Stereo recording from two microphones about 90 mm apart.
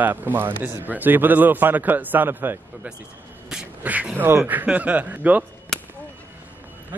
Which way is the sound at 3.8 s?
15° right (ahead or behind).